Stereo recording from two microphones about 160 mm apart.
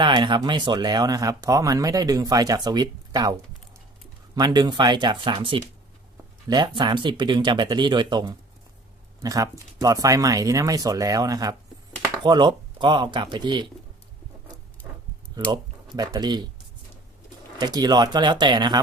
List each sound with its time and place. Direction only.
0.0 s speech: 30° right (ahead or behind)
4.4 s speech: 25° right (ahead or behind)
15.5 s speech: 25° right (ahead or behind)
17.6 s speech: 25° right (ahead or behind)